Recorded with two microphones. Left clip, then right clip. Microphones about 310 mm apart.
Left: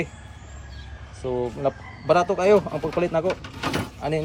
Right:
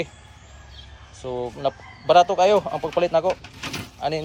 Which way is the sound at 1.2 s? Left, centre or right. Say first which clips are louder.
Left 2 dB; right.